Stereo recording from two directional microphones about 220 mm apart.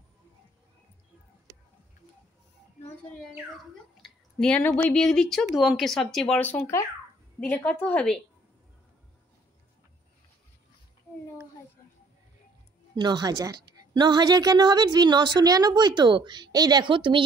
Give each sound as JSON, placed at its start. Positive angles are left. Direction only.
{"t": 3.9, "sound": "speech", "side_deg": 0}
{"t": 12.9, "sound": "a woman's voice", "side_deg": -20}